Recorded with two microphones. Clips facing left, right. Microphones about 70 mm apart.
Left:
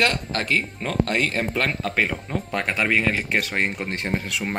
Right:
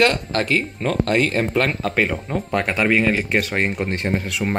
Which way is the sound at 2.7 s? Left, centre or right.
Centre.